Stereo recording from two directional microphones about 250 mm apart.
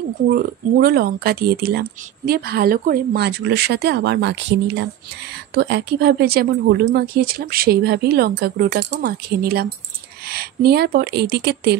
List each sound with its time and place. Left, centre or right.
0.3 s speech: right